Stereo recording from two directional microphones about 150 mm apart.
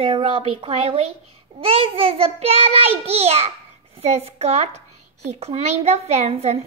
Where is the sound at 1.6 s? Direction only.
40° right (ahead or behind).